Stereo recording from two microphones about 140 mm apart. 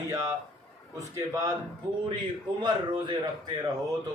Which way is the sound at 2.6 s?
35° right (ahead or behind).